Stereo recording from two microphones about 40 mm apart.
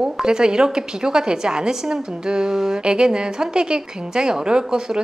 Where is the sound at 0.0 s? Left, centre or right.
Centre.